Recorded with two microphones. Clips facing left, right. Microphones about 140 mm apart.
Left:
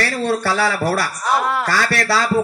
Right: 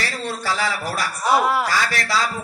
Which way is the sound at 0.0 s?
55° left (ahead or behind).